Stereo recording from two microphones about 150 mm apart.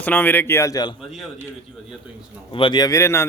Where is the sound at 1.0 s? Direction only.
Centre (ahead or behind).